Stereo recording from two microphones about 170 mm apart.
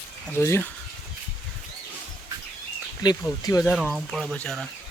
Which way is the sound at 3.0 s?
25° left (ahead or behind).